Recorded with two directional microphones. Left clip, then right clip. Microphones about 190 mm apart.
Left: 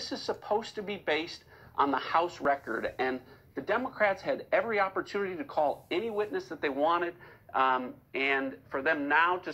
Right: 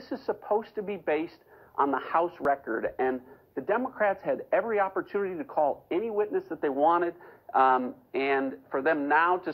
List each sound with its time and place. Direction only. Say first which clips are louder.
0.0 s a man's voice: right 2 dB; 40° right (ahead or behind)